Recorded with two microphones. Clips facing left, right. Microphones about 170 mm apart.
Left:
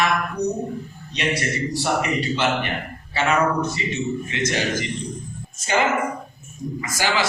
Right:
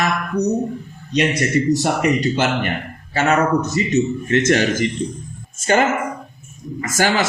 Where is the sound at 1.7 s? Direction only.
45° right (ahead or behind).